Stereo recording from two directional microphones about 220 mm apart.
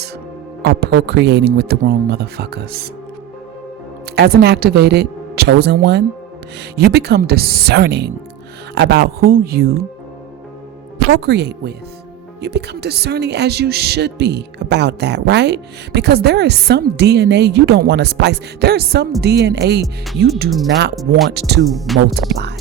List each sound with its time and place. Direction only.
0.6 s speech: 45° right (ahead or behind)
4.1 s speech: 50° right (ahead or behind)
11.1 s speech: 50° right (ahead or behind)
20.9 s speech: centre (ahead or behind)
21.3 s speech: 50° right (ahead or behind)
21.7 s speech: centre (ahead or behind)